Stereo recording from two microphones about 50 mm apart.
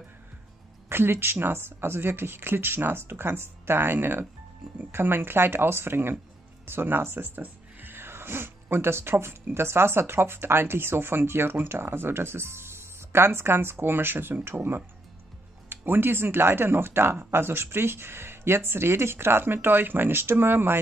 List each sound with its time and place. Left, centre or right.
0.8 s speech: right